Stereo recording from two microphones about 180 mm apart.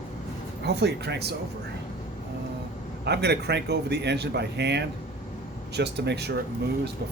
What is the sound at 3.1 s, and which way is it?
Speech, 65° right (ahead or behind).